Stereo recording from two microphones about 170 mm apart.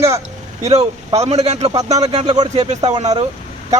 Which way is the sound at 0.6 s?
40° right (ahead or behind).